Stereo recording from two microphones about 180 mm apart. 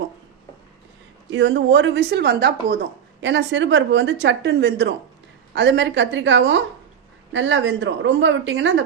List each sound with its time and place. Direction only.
1.3 s speech: 90° right; by 2.7 s 70° right (ahead or behind)
3.2 s speech: 90° right